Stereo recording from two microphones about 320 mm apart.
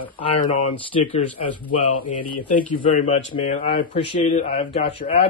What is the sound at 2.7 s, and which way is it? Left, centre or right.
Speech, centre.